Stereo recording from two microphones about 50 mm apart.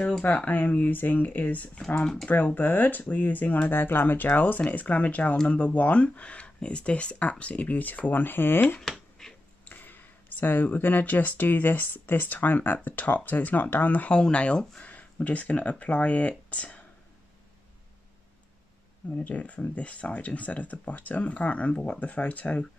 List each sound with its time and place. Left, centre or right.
0.5 s speech: left
2.0 s speech: centre
2.2 s speech: left
4.3 s speech: left
9.2 s a sound: centre
9.7 s speech: left
14.1 s speech: left
19.1 s speech: left